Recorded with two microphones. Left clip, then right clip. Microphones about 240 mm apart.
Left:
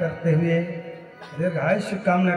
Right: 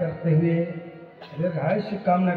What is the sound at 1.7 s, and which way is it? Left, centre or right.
Speech, centre.